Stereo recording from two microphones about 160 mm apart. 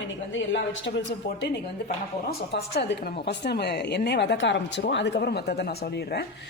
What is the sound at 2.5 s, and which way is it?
A woman's voice, 90° left.